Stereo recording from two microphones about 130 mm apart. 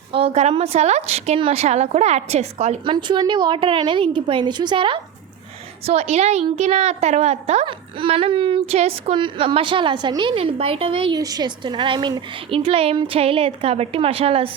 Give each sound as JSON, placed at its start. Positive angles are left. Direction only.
{"t": 0.1, "sound": "a woman's voice", "side_deg": -45}
{"t": 2.8, "sound": "a woman's voice", "side_deg": -35}
{"t": 5.8, "sound": "a woman's voice", "side_deg": -55}
{"t": 11.2, "sound": "a child's voice", "side_deg": -30}